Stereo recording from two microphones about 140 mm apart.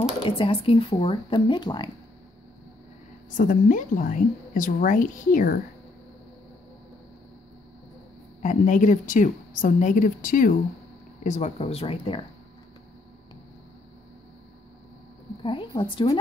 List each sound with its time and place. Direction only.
0.2 s speech: 40° left (ahead or behind)
3.3 s a woman's voice: 75° left (ahead or behind)
8.4 s a woman's voice: 65° left (ahead or behind)
11.2 s speech: 55° left (ahead or behind)
15.4 s speech: 35° left (ahead or behind)